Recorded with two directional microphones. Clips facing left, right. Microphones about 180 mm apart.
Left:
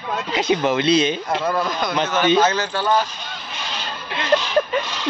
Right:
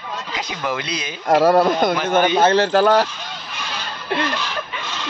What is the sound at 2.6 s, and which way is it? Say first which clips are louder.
Speech: right 6 dB; 85° right.